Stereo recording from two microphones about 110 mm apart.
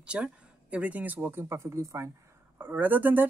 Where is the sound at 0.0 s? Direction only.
10° right (ahead or behind); by 2.0 s 25° right (ahead or behind).